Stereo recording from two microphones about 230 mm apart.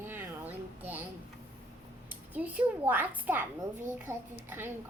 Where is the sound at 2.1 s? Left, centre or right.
Centre.